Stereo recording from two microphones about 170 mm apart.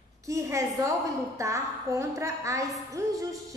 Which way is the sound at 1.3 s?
20° right (ahead or behind).